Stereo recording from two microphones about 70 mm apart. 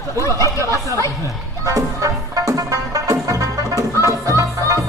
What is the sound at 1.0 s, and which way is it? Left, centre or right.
Speech, left.